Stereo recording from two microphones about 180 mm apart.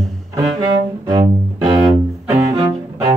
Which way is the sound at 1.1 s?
25° right (ahead or behind).